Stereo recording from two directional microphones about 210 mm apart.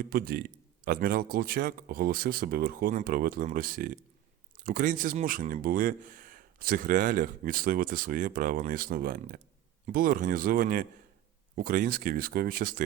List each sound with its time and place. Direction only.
0.0 s speech: 45° right (ahead or behind)